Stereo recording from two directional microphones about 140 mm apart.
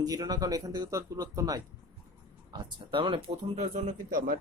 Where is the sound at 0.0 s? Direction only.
30° right (ahead or behind).